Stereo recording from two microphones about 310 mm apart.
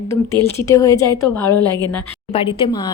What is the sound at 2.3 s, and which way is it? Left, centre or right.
Speech, centre.